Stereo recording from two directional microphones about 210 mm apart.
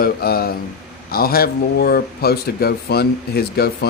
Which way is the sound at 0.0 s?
45° left (ahead or behind).